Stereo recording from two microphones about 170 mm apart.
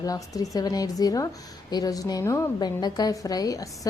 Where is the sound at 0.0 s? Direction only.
20° left (ahead or behind).